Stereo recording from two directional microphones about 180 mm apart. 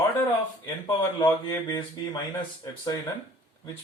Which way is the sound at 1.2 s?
20° left (ahead or behind).